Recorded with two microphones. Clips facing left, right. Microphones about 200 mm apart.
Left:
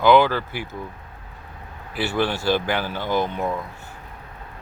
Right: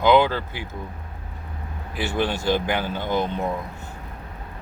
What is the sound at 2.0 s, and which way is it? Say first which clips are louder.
Speech: left 1 dB; 15° right (ahead or behind).